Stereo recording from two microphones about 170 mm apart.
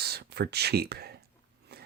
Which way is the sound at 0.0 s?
70° right (ahead or behind).